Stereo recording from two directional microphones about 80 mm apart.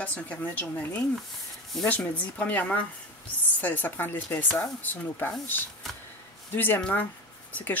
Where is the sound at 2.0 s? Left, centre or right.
Centre.